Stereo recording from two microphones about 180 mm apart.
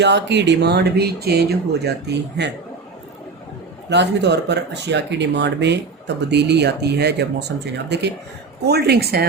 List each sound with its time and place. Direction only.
0.0 s speech: 75° right (ahead or behind)
3.8 s speech: 70° right (ahead or behind)